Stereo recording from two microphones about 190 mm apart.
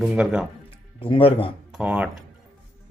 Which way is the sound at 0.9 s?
30° left (ahead or behind).